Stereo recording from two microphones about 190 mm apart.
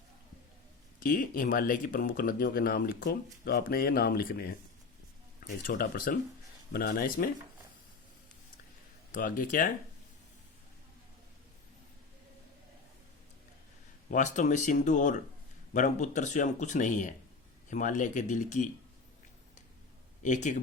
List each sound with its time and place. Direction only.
1.0 s speech: 45° left (ahead or behind)
9.1 s speech: 45° left (ahead or behind)
14.1 s speech: 40° left (ahead or behind)
20.2 s speech: 40° left (ahead or behind)